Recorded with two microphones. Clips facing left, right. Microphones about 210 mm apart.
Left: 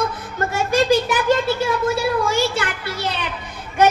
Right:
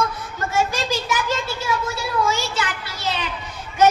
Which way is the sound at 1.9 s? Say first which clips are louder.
Left 4 dB; 55° left (ahead or behind).